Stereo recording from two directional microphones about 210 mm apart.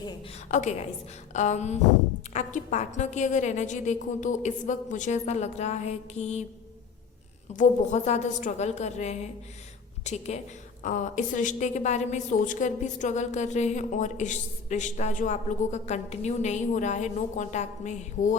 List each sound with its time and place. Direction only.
0.4 s a woman's voice: 35° left (ahead or behind)
7.5 s a woman's voice: 35° left (ahead or behind)